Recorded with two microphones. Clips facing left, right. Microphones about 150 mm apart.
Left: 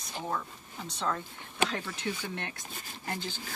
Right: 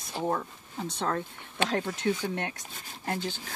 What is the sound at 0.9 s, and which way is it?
Speech, 55° right (ahead or behind).